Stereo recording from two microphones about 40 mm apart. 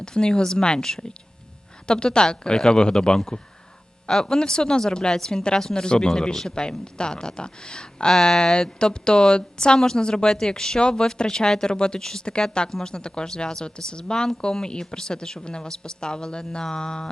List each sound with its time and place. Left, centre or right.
0.0 s speech: centre